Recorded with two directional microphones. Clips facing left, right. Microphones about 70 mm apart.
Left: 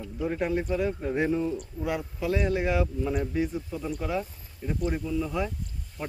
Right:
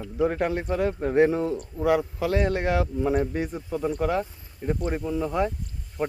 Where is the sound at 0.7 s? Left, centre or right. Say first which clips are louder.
Right 3 dB; right.